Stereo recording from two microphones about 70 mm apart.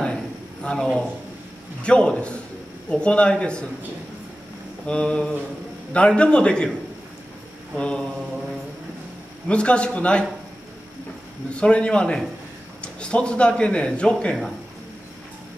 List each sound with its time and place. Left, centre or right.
0.0 s a sound: centre
1.8 s a man's voice: centre
4.8 s a man's voice: centre
7.7 s a man's voice: centre
9.5 s a man's voice: centre
11.6 s a man's voice: centre